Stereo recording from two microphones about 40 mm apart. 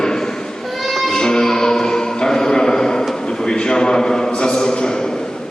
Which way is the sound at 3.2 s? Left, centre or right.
Centre.